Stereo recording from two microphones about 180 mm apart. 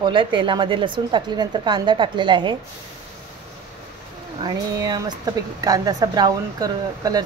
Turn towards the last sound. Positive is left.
turn(degrees=-20)  # may be behind; listen again after turning